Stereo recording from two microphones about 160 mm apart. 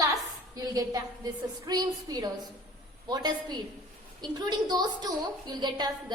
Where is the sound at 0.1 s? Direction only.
20° right (ahead or behind).